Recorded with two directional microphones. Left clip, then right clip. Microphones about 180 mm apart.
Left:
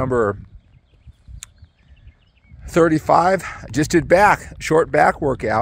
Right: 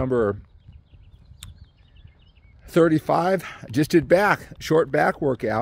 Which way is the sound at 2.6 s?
20° right (ahead or behind).